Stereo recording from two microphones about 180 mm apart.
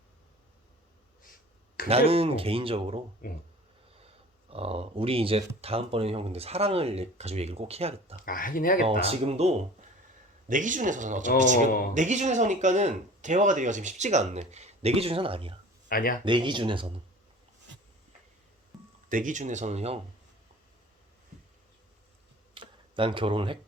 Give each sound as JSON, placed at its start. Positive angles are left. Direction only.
{"t": 1.2, "sound": "a sound", "side_deg": 50}
{"t": 1.9, "sound": "speech", "side_deg": -35}
{"t": 3.2, "sound": "speech", "side_deg": 50}
{"t": 4.0, "sound": "speech", "side_deg": -35}
{"t": 8.2, "sound": "speech", "side_deg": 50}
{"t": 8.9, "sound": "speech", "side_deg": -35}
{"t": 15.9, "sound": "speech", "side_deg": 50}
{"t": 16.2, "sound": "speech", "side_deg": -25}
{"t": 19.0, "sound": "speech", "side_deg": -45}
{"t": 22.5, "sound": "tick", "side_deg": -30}